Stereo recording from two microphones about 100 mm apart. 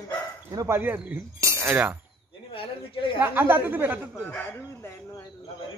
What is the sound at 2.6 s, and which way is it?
Speech, 60° left (ahead or behind).